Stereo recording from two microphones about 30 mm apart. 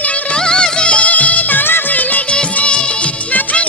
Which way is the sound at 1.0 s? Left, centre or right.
Left.